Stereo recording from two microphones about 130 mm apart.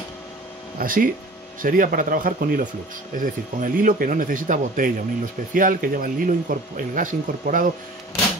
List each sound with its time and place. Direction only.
0.7 s speech: 90° right